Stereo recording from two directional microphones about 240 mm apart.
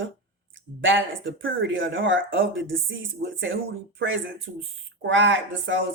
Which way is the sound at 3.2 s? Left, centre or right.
Right.